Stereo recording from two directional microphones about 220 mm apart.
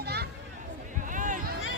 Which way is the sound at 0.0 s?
45° right (ahead or behind).